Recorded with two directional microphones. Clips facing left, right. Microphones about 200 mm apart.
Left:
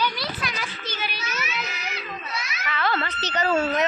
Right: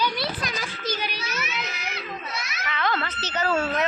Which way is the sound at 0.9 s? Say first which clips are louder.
Right 1 dB; 35° right (ahead or behind).